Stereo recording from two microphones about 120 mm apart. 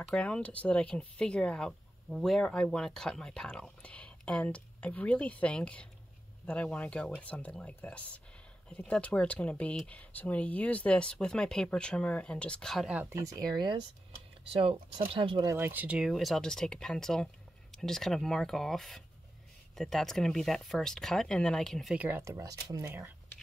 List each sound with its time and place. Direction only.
0.1 s speech: 10° left (ahead or behind)
12.8 s speech: 10° right (ahead or behind)
13.1 s speech: 25° right (ahead or behind)
14.5 s speech: 50° right (ahead or behind)
15.4 s speech: 20° right (ahead or behind)
16.1 s speech: centre (ahead or behind)
21.9 s speech: 15° right (ahead or behind)